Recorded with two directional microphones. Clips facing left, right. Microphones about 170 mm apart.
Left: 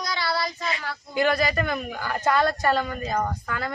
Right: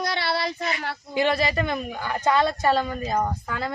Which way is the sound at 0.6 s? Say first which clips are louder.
Right 2 dB; 30° right (ahead or behind).